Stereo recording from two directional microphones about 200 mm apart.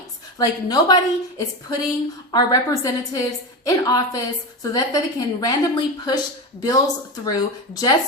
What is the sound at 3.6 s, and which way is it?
A woman's voice, 20° left (ahead or behind).